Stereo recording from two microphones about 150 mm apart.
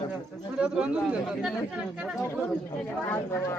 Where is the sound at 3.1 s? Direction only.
20° left (ahead or behind).